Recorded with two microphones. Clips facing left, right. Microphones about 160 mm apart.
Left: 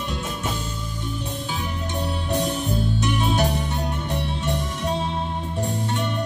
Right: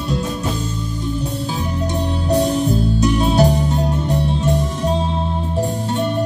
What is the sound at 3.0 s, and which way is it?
Music, 35° right (ahead or behind).